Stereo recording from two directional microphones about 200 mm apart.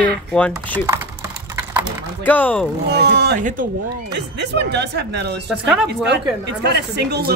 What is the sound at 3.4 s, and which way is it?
Speech, 45° right (ahead or behind).